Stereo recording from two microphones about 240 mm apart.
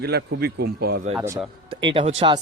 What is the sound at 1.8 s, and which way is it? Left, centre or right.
Speech, right.